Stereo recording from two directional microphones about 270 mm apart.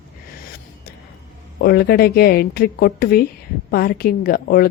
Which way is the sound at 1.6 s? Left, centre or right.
Left.